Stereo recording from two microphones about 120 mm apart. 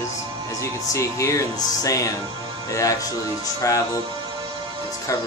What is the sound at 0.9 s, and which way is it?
Speech, 25° left (ahead or behind).